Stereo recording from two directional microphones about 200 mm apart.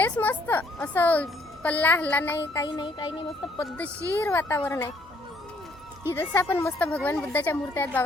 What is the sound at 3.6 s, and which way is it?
Speech, 10° left (ahead or behind).